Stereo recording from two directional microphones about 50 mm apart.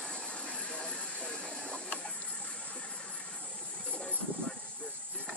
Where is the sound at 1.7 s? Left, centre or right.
Left.